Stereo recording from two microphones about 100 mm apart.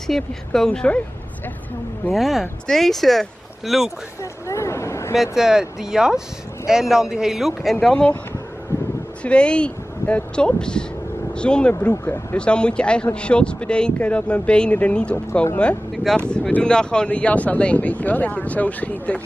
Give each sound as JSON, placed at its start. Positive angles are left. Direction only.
{"t": 0.0, "sound": "a man's voice", "side_deg": 5}
{"t": 2.1, "sound": "speech", "side_deg": 0}
{"t": 4.2, "sound": "speech", "side_deg": 30}
{"t": 5.1, "sound": "speech", "side_deg": -5}
{"t": 7.8, "sound": "a man's voice", "side_deg": 10}
{"t": 9.2, "sound": "a man's voice", "side_deg": 10}
{"t": 12.0, "sound": "speech", "side_deg": 20}
{"t": 12.4, "sound": "a man's voice", "side_deg": 10}
{"t": 15.9, "sound": "a sound", "side_deg": 0}
{"t": 16.2, "sound": "a man's voice", "side_deg": 10}